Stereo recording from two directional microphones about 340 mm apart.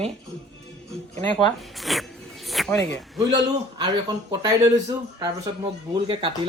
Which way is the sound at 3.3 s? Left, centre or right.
Centre.